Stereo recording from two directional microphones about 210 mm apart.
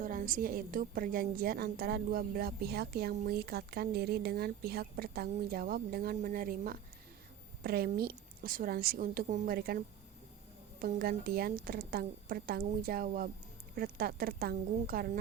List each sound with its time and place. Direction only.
0.0 s a woman's voice: 40° right (ahead or behind)